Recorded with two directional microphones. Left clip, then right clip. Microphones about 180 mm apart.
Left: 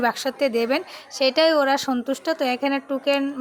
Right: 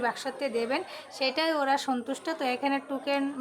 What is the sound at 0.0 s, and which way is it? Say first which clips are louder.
A woman's voice: left 8 dB; 40° left (ahead or behind).